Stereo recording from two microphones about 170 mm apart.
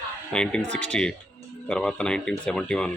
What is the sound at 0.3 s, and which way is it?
Speech, 5° left (ahead or behind).